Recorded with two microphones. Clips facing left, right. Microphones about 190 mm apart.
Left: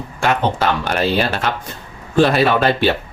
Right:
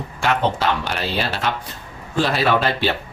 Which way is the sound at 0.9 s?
50° left (ahead or behind).